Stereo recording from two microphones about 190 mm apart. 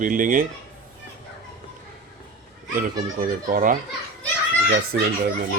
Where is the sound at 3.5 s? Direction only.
45° right (ahead or behind).